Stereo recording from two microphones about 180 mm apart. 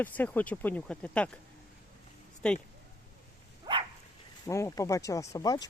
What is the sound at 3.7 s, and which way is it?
Dog, 25° right (ahead or behind).